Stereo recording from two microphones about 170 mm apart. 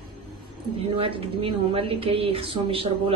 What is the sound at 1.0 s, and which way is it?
A woman's voice, 30° right (ahead or behind).